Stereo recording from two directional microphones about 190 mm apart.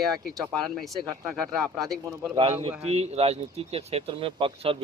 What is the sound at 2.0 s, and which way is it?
Speech, 15° right (ahead or behind).